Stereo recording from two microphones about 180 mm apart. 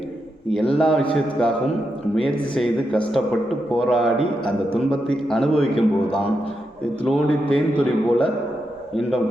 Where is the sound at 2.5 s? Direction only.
5° left (ahead or behind).